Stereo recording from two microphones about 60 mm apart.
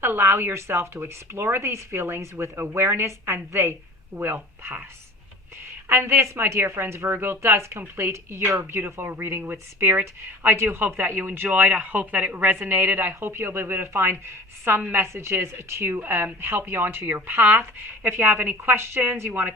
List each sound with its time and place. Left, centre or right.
0.0 s a woman's voice: right
4.1 s speech: right
5.9 s a woman's voice: right
8.7 s speech: right
12.5 s speech: right
14.9 s speech: right